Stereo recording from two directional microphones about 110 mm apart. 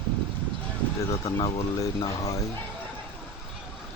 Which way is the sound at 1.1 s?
35° left (ahead or behind).